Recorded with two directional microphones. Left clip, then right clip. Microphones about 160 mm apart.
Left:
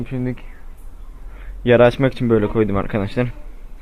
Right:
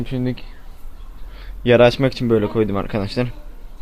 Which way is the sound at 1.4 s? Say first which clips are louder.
Even; 15° right (ahead or behind).